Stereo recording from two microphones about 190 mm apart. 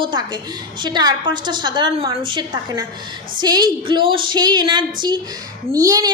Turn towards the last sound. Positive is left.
turn(degrees=-20)  # may be behind; listen again after turning